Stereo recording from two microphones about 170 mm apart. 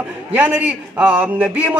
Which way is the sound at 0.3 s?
10° right (ahead or behind).